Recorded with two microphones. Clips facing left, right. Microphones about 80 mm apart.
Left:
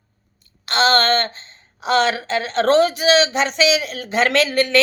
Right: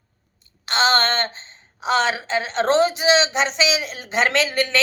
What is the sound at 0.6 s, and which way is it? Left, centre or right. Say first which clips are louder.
Speech: left 2 dB; right.